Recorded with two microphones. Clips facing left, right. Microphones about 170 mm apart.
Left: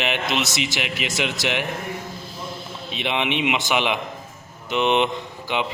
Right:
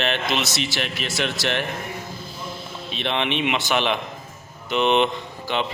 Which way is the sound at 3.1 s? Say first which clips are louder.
Left 1 dB; 15° left (ahead or behind).